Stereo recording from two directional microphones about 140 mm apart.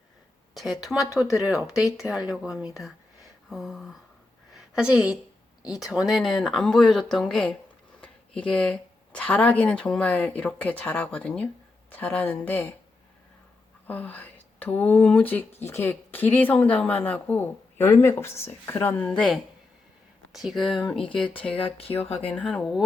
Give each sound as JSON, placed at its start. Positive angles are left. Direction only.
{"t": 0.5, "sound": "speech", "side_deg": 0}
{"t": 4.5, "sound": "a sound", "side_deg": -5}
{"t": 5.8, "sound": "speech", "side_deg": 0}
{"t": 13.8, "sound": "speech", "side_deg": 10}
{"t": 21.5, "sound": "speech", "side_deg": 40}
{"t": 22.3, "sound": "speech", "side_deg": 10}